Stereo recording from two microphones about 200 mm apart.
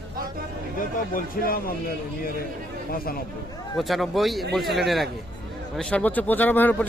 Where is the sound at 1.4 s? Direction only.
45° left (ahead or behind).